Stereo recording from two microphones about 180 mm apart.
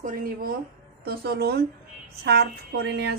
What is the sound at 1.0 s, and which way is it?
Speech, 60° right (ahead or behind).